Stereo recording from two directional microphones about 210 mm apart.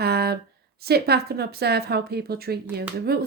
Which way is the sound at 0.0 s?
50° right (ahead or behind).